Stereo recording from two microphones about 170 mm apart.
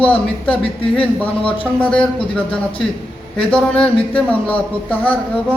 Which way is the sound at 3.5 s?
5° left (ahead or behind).